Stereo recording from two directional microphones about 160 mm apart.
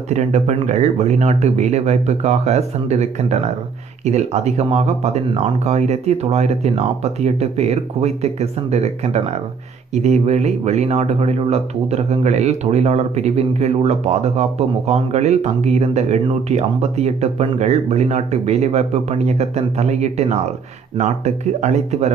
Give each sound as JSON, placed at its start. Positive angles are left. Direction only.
{"t": 0.1, "sound": "speech", "side_deg": -45}